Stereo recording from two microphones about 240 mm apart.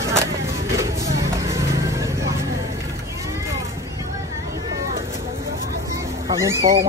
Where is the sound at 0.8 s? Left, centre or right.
Centre.